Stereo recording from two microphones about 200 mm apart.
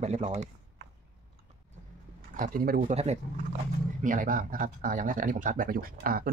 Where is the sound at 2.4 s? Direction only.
45° right (ahead or behind).